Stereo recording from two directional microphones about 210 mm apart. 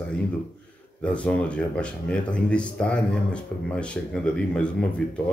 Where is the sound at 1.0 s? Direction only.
5° left (ahead or behind).